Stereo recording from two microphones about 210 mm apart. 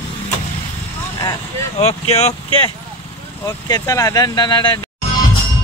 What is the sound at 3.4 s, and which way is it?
Speech, 15° left (ahead or behind).